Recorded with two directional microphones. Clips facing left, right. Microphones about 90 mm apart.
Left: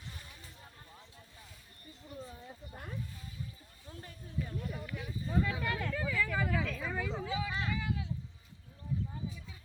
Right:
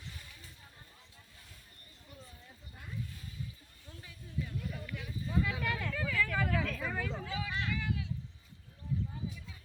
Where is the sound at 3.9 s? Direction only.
35° left (ahead or behind).